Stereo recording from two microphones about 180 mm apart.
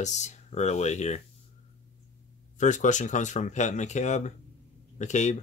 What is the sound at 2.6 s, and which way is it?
Speech, 45° left (ahead or behind).